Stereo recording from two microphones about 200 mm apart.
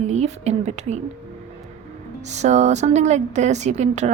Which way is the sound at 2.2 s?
35° right (ahead or behind).